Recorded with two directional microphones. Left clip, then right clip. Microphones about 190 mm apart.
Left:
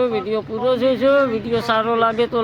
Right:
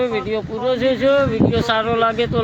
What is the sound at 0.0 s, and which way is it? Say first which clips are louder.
Speech: even; 10° left (ahead or behind).